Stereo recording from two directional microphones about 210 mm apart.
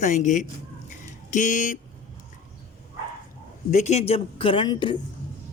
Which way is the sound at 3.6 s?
35° left (ahead or behind).